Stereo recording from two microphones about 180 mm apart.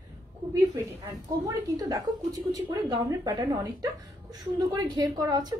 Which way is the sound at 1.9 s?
15° right (ahead or behind).